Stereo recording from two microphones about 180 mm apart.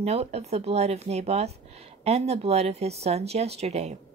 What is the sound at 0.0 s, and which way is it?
Speech, 35° right (ahead or behind).